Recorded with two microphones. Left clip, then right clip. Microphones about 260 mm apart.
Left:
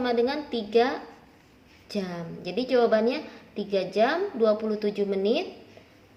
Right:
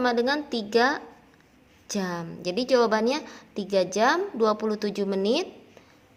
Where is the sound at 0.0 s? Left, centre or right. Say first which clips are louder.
Right 1 dB; right.